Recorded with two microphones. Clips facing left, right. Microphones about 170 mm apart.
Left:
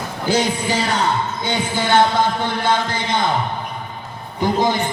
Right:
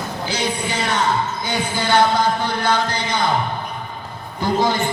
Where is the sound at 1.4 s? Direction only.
20° left (ahead or behind).